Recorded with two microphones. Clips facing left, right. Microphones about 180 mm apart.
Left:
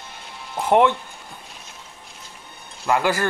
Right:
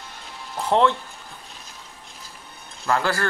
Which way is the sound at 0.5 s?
15° left (ahead or behind).